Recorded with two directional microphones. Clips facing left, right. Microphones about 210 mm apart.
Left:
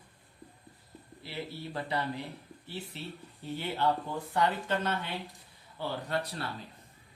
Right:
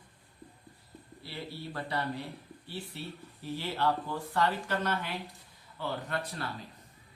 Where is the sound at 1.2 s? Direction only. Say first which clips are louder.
Left 2 dB; 20° left (ahead or behind).